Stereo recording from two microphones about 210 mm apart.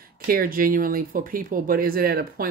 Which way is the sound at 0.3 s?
45° right (ahead or behind).